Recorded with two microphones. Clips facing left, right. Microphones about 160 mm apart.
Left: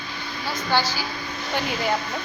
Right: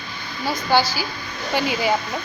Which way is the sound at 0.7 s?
10° right (ahead or behind).